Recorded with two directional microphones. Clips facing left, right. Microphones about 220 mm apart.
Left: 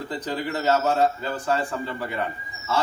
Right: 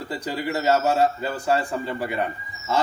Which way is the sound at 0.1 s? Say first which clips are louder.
Right 2 dB; 10° right (ahead or behind).